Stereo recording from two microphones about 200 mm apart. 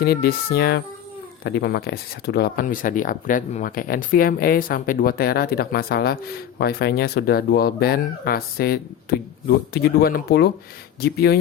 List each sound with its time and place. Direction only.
0.0 s speech: 50° left (ahead or behind)